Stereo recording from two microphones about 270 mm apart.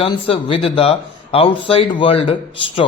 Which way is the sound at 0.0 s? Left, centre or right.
Centre.